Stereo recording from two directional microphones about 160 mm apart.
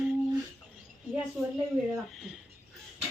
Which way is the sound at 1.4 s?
Centre (ahead or behind).